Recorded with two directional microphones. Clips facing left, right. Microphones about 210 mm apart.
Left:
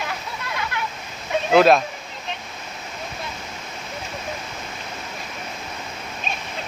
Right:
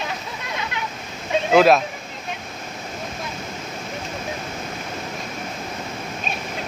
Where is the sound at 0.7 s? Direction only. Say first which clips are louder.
Left 2 dB; 20° right (ahead or behind).